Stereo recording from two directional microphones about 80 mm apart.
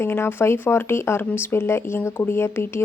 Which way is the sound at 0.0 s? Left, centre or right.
Left.